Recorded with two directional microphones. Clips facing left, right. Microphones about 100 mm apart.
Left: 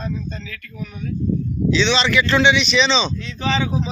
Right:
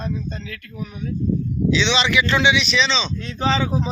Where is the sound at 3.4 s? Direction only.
35° right (ahead or behind).